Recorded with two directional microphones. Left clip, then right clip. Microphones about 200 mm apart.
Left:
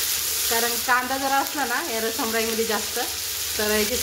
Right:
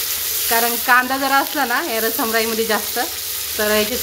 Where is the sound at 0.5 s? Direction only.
25° right (ahead or behind).